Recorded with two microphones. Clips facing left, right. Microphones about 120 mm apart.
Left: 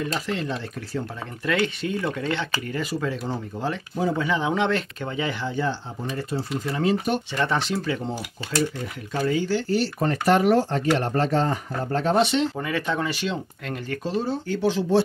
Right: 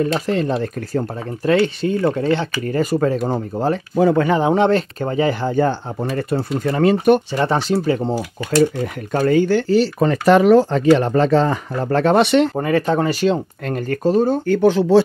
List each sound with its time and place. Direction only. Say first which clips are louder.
0.0 s speech: right 9 dB; 45° right (ahead or behind)
1.5 s speech: right 8 dB; 35° right (ahead or behind)
3.9 s speech: right 10 dB; 65° right (ahead or behind)
4.3 s speech: right 8 dB; 45° right (ahead or behind); by 7.2 s 60° right (ahead or behind)
7.3 s speech: right 6 dB; 35° right (ahead or behind)
9.1 s speech: right 8 dB; 55° right (ahead or behind)
10.3 s speech: right 8 dB; 90° right; by 15.0 s 60° right (ahead or behind)